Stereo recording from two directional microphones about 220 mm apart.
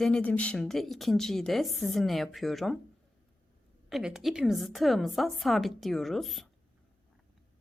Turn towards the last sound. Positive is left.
turn(degrees=0)  # may be behind; listen again after turning